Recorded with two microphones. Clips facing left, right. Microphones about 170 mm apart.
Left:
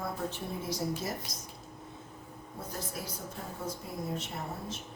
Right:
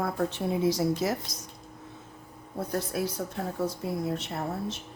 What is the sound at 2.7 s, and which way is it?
A woman's voice, 65° right (ahead or behind).